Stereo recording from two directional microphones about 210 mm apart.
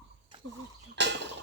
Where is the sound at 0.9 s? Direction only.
55° right (ahead or behind).